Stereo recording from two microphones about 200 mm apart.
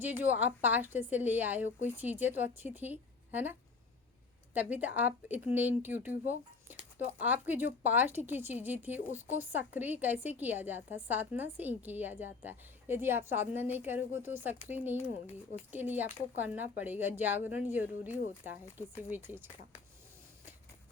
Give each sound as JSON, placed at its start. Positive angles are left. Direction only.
{"t": 0.0, "sound": "a woman's voice", "side_deg": -10}